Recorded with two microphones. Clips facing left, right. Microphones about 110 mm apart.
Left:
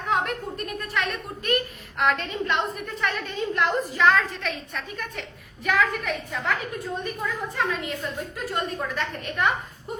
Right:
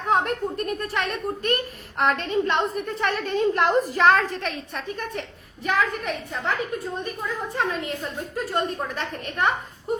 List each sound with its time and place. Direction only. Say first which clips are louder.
0.1 s a child's voice: right 3 dB; 40° right (ahead or behind)
7.5 s a child's voice: right 3 dB; 40° right (ahead or behind)